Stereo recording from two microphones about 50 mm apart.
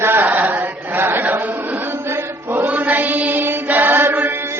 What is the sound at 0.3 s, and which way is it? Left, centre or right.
Chant, right.